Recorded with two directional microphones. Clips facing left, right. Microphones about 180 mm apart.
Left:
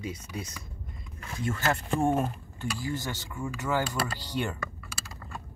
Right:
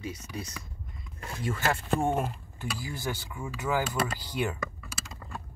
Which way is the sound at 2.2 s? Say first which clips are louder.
Left 2 dB; 10° right (ahead or behind).